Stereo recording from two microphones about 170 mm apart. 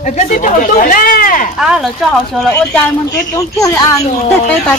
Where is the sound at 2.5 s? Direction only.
10° left (ahead or behind).